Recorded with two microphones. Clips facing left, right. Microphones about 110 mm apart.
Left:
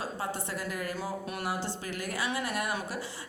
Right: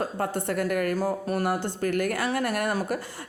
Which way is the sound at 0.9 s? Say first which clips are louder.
Right 9 dB; 40° right (ahead or behind).